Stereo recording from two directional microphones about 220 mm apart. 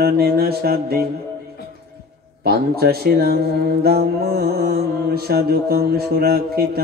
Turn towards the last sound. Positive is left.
turn(degrees=-45)  # may be behind; listen again after turning